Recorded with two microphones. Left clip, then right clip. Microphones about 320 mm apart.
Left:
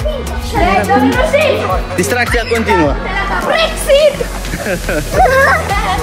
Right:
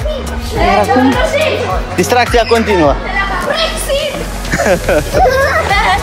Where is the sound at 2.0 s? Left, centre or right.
Centre.